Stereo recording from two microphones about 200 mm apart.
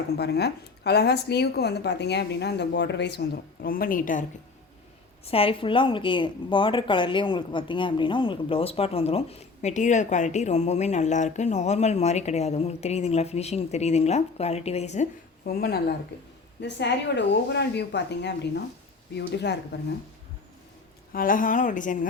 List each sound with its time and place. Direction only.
0.2 s a woman's voice: 55° left (ahead or behind)
5.2 s speech: 30° left (ahead or behind)
15.4 s speech: 50° left (ahead or behind)
16.6 s a woman's voice: 60° left (ahead or behind)
21.1 s speech: 45° left (ahead or behind)